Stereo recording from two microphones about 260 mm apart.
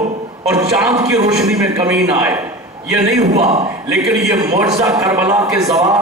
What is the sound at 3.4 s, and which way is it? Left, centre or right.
Speech, right.